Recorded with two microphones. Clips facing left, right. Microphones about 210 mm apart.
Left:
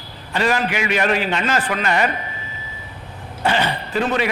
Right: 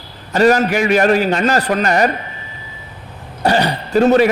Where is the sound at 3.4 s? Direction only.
40° right (ahead or behind).